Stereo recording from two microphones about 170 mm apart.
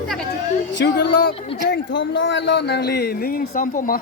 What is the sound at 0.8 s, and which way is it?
Speech, 90° left.